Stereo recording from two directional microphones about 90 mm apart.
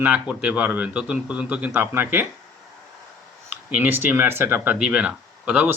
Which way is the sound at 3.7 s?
20° right (ahead or behind).